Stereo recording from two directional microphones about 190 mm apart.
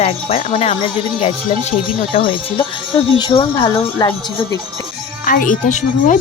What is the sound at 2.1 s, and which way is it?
Speech, 30° left (ahead or behind).